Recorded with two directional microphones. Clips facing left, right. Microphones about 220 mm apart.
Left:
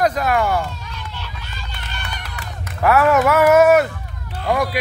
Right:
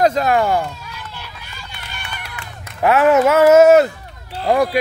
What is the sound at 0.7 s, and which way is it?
Run, 5° right (ahead or behind).